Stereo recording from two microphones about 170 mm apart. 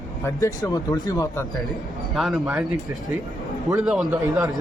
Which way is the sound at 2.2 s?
Centre (ahead or behind).